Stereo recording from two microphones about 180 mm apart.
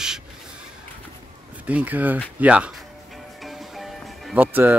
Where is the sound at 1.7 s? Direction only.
10° right (ahead or behind).